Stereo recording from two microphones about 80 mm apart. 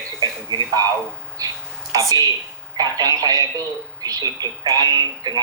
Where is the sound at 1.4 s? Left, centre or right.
Right.